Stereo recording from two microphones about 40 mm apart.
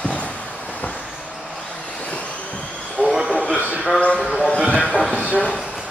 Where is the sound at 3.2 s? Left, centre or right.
Centre.